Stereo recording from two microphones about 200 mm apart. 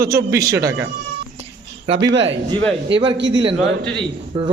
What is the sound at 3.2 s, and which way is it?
Speech, 65° right (ahead or behind).